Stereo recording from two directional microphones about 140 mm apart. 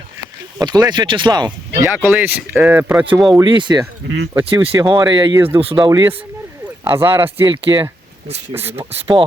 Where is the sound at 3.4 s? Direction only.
35° right (ahead or behind).